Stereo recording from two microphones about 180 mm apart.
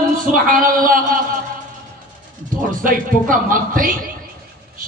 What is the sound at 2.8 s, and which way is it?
Speech, 50° right (ahead or behind).